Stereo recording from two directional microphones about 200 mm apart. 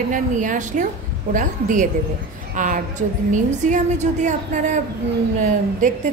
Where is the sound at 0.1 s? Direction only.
40° right (ahead or behind).